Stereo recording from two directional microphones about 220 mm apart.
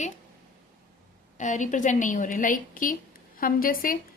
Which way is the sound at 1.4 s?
35° left (ahead or behind).